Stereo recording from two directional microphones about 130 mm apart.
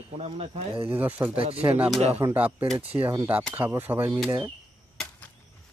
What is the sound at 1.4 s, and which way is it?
Speech, 45° right (ahead or behind).